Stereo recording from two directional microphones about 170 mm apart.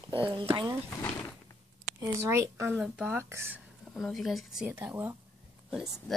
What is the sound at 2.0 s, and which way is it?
Speech, 15° right (ahead or behind).